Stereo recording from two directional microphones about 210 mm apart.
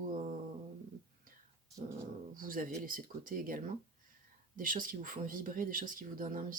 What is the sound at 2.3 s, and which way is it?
Speech, 40° right (ahead or behind).